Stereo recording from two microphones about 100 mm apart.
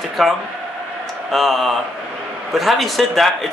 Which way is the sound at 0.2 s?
Centre (ahead or behind).